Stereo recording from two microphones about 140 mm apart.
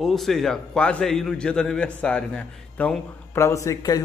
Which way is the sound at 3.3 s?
20° left (ahead or behind).